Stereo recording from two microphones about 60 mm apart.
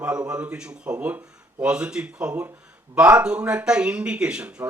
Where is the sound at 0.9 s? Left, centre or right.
Right.